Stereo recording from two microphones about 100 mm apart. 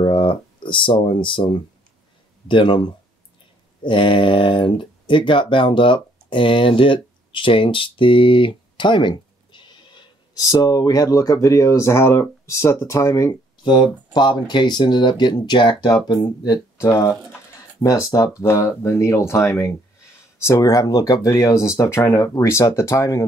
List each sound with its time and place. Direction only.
0.0 s speech: 55° left (ahead or behind); by 13.4 s 30° left (ahead or behind)
13.7 s speech: 50° left (ahead or behind)
16.7 s speech: 25° left (ahead or behind)